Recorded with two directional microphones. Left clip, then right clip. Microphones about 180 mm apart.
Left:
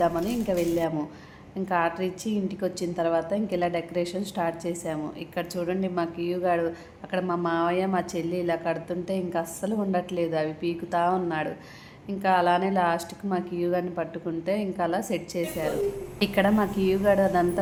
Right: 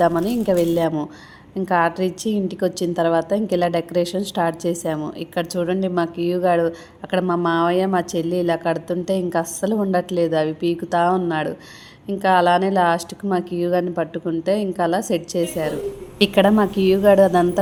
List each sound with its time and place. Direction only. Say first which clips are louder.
0.0 s a woman's voice: right 7 dB; 40° right (ahead or behind)